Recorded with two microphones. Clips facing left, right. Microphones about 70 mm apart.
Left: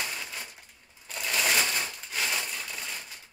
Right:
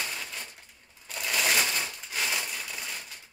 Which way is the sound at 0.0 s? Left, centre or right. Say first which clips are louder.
Even; centre.